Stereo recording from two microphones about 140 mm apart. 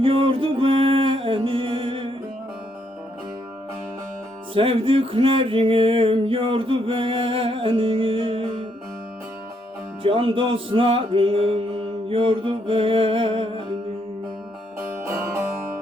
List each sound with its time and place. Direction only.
0.0 s music: 40° right (ahead or behind)
4.5 s music: 40° right (ahead or behind)
10.0 s music: 40° right (ahead or behind)
14.8 s music: 20° right (ahead or behind)